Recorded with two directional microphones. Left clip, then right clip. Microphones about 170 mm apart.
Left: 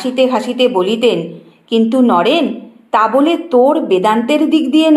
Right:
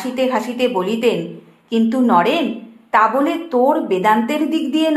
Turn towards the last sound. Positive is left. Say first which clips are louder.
# left 6 dB
turn(degrees=35)  # may be behind; listen again after turning